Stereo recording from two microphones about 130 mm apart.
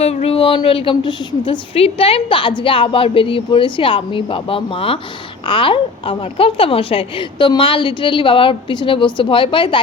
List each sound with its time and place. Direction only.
0.0 s a woman's voice: 50° left (ahead or behind)